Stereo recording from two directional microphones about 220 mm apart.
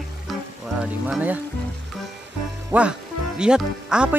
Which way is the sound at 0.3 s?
Centre (ahead or behind).